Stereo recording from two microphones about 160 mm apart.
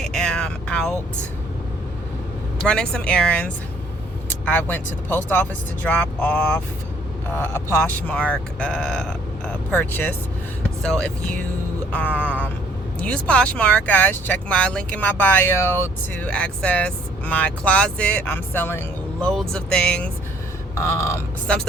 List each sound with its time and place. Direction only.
0.0 s vehicle: 5° left (ahead or behind)
2.6 s speech: 5° left (ahead or behind)
11.9 s music: 10° left (ahead or behind)
13.0 s speech: 5° left (ahead or behind)
20.7 s a sound: 20° left (ahead or behind)
21.4 s speech: 5° left (ahead or behind)